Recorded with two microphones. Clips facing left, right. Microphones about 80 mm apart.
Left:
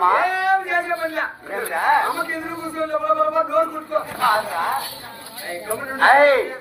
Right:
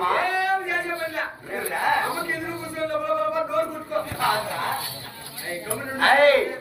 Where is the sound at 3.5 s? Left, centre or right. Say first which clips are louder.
Left 5 dB; centre.